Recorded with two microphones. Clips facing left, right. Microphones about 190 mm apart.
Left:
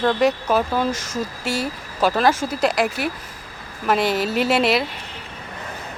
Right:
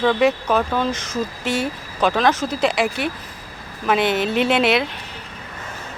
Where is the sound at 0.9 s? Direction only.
45° left (ahead or behind).